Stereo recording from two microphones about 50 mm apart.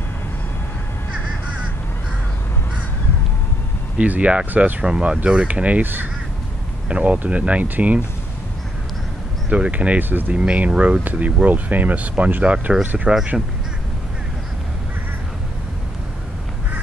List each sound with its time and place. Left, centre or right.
4.0 s speech: right
6.9 s speech: right
9.5 s speech: right
10.3 s speech: right